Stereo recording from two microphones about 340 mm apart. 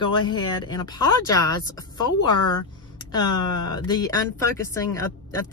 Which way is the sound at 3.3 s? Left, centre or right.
Left.